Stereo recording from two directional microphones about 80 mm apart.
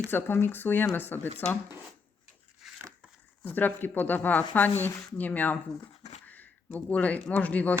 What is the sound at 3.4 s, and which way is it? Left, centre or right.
Speech, left.